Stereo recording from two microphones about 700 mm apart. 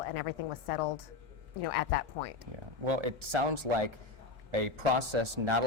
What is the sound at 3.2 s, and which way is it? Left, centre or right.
Speech, right.